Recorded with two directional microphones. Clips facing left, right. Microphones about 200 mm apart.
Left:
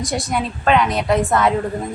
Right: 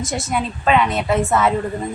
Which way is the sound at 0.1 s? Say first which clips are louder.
Left 1 dB; centre (ahead or behind).